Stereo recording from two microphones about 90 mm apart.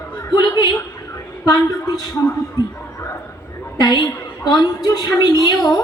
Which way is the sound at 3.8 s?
50° left (ahead or behind).